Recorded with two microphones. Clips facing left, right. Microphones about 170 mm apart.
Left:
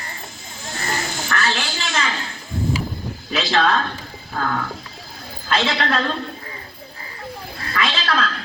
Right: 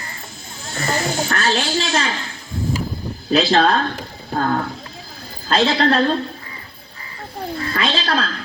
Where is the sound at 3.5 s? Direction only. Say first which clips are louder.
Right 3 dB; 35° right (ahead or behind).